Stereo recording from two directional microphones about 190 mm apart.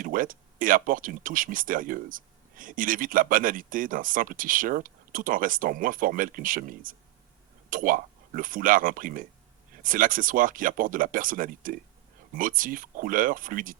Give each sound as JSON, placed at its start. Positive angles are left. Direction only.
{"t": 0.0, "sound": "speech", "side_deg": -45}